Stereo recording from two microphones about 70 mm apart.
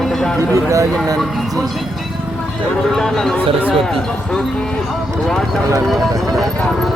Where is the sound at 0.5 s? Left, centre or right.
Right.